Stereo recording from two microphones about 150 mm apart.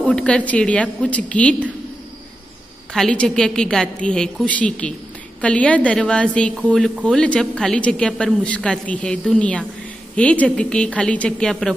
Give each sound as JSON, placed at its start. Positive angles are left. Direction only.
{"t": 0.0, "sound": "a woman's voice", "side_deg": 5}
{"t": 2.9, "sound": "a woman's voice", "side_deg": 5}